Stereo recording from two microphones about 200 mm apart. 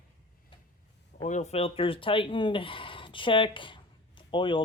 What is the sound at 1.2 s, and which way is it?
Speech, 35° left (ahead or behind).